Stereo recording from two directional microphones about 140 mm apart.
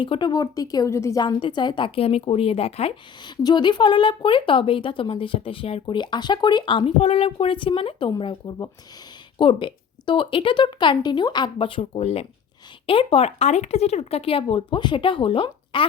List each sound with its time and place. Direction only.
0.0 s speech: 35° left (ahead or behind)
3.2 s speech: 30° left (ahead or behind)